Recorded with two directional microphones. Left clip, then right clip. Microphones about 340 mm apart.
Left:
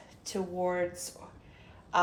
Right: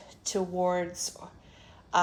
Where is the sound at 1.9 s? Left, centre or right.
Right.